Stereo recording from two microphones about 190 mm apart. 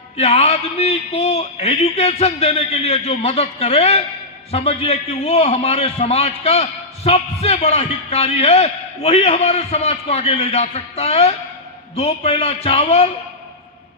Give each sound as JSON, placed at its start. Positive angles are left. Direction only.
{"t": 0.2, "sound": "a man's voice", "side_deg": 35}